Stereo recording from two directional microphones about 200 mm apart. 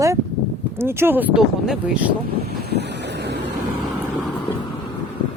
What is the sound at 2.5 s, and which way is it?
Wind noise, 55° right (ahead or behind).